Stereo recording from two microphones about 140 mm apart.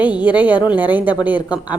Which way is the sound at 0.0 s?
10° right (ahead or behind).